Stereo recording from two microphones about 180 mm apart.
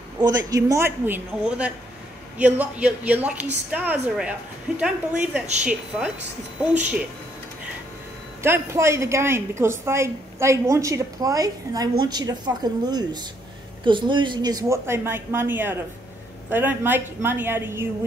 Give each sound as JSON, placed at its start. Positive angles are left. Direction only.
{"t": 0.2, "sound": "a woman's voice", "side_deg": -20}
{"t": 8.4, "sound": "a woman's voice", "side_deg": -15}